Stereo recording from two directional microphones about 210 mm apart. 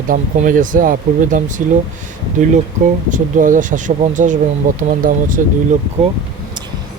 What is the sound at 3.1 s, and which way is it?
Speech, 40° right (ahead or behind).